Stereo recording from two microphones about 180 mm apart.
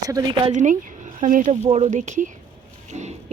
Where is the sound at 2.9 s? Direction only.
40° right (ahead or behind).